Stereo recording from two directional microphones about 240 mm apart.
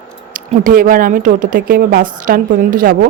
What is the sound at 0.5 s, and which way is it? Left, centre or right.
A woman's voice, right.